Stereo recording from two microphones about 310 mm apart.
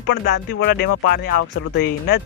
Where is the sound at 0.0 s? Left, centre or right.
Left.